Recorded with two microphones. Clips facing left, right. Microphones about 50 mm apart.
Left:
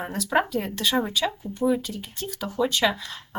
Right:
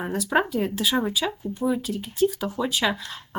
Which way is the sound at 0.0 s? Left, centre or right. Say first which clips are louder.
Right 1 dB; centre.